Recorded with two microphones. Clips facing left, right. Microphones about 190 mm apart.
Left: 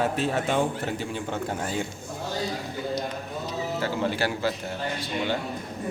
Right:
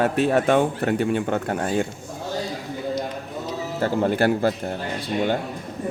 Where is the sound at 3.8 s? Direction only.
50° right (ahead or behind).